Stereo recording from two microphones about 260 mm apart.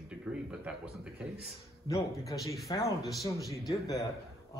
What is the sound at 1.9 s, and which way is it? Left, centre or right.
A man's voice, centre.